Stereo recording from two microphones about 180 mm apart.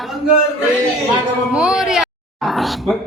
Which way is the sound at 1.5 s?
5° right (ahead or behind).